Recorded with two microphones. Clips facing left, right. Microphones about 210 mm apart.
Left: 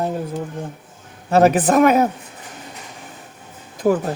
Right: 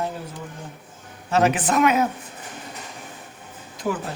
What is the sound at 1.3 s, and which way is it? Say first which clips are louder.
Speech: left 6 dB; 35° left (ahead or behind).